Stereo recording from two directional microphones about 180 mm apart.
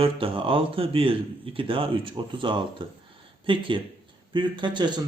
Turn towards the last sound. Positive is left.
turn(degrees=-25)  # may be behind; listen again after turning